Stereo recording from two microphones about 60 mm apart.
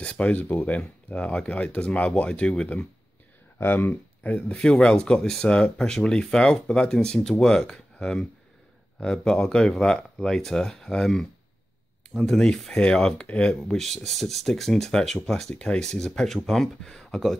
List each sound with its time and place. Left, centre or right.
0.0 s speech: left
3.5 s speech: left
4.5 s speech: centre
13.7 s speech: centre